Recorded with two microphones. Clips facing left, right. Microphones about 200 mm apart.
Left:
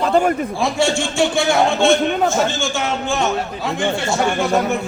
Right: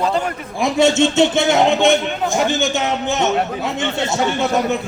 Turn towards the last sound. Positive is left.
turn(degrees=-20)  # may be behind; listen again after turning